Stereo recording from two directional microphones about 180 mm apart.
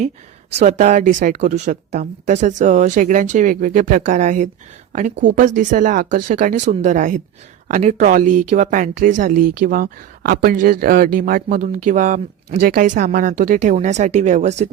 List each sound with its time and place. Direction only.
0.5 s a woman's voice: 40° right (ahead or behind)